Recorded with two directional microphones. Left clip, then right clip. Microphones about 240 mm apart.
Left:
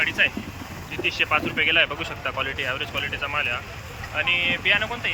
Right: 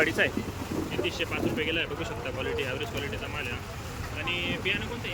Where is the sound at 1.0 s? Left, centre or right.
Centre.